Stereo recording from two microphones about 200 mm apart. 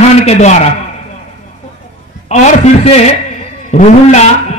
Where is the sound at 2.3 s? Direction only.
30° left (ahead or behind).